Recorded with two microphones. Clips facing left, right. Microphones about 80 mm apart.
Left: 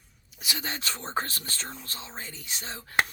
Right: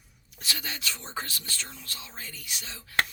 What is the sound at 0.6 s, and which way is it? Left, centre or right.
Speech, left.